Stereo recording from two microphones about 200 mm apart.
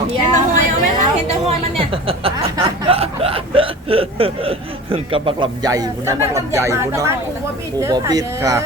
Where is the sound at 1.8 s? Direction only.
25° right (ahead or behind).